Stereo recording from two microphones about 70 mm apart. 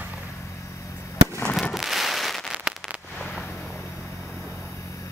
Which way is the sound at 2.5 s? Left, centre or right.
Centre.